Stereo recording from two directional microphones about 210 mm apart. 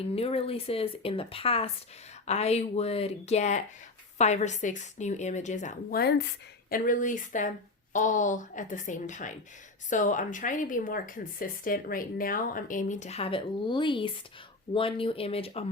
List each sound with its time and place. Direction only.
0.0 s speech: 30° left (ahead or behind)